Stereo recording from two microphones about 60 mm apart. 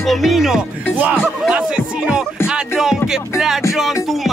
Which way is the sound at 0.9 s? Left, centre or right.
Right.